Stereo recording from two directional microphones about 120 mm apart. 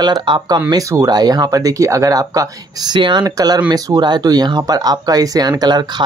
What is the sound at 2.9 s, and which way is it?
Speech, 40° right (ahead or behind).